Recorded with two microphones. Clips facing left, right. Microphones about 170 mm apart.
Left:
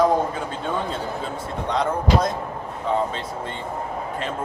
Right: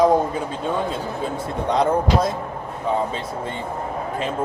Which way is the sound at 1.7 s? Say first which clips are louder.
Right 3 dB; 10° right (ahead or behind).